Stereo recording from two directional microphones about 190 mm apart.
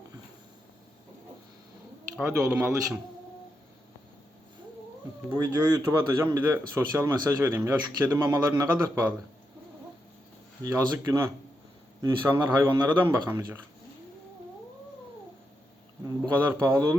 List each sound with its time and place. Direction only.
2.2 s speech: 15° right (ahead or behind)
5.3 s speech: 15° right (ahead or behind)
10.6 s speech: 15° right (ahead or behind)
16.0 s speech: 15° right (ahead or behind)